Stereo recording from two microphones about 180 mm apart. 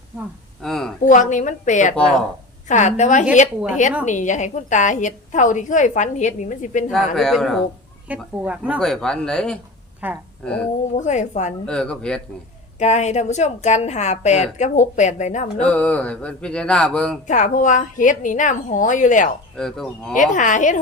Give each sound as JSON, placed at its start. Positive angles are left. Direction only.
{"t": 0.6, "sound": "a sound", "side_deg": 0}
{"t": 1.0, "sound": "a woman's voice", "side_deg": 45}
{"t": 6.9, "sound": "speech", "side_deg": 0}
{"t": 8.8, "sound": "speech", "side_deg": 5}
{"t": 10.0, "sound": "speech", "side_deg": -10}
{"t": 10.9, "sound": "a woman's voice", "side_deg": 40}
{"t": 11.6, "sound": "speech", "side_deg": 5}
{"t": 12.8, "sound": "a woman's voice", "side_deg": 40}
{"t": 15.6, "sound": "speech", "side_deg": 5}
{"t": 17.2, "sound": "a woman's voice", "side_deg": 45}
{"t": 19.5, "sound": "speech", "side_deg": 0}
{"t": 20.3, "sound": "a woman's voice", "side_deg": 45}